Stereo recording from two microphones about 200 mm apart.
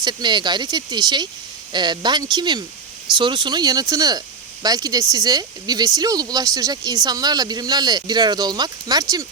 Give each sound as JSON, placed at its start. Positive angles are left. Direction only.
{"t": 0.0, "sound": "speech", "side_deg": -20}